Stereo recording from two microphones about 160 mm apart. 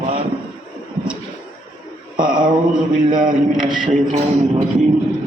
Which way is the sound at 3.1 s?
60° right (ahead or behind).